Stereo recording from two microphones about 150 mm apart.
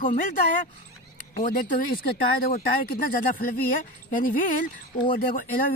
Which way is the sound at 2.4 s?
80° left.